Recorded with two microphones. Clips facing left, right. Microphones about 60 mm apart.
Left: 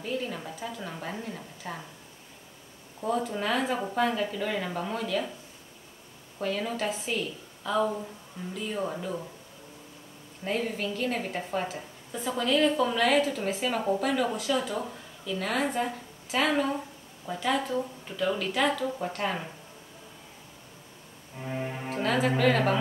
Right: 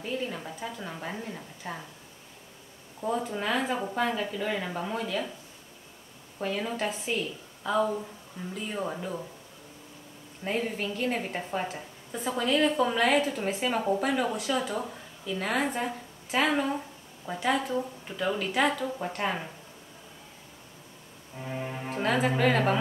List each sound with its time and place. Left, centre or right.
0.0 s a woman's voice: centre
3.0 s a woman's voice: centre
6.4 s a woman's voice: centre
10.4 s a woman's voice: centre
21.4 s a woman's voice: centre
21.8 s music: centre
22.4 s a woman's voice: centre